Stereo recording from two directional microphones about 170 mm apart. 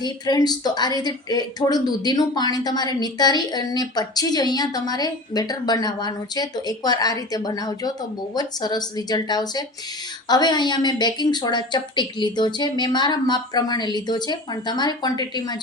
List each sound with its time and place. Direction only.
0.0 s speech: 25° left (ahead or behind)